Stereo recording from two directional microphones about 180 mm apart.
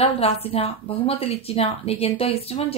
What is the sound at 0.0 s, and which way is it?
A woman's voice, 35° left (ahead or behind).